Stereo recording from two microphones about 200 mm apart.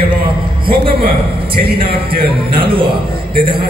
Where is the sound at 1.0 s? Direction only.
50° right (ahead or behind).